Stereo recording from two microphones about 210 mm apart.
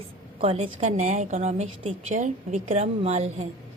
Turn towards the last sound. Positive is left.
turn(degrees=-30)  # may be behind; listen again after turning